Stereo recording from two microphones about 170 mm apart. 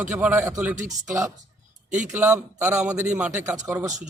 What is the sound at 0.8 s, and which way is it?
Speech, 45° right (ahead or behind).